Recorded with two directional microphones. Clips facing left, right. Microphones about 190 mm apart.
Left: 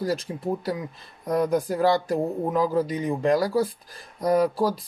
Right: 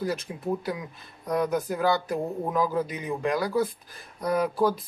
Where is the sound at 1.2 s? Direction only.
30° left (ahead or behind).